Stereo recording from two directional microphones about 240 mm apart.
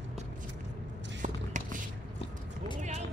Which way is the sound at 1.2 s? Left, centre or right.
Right.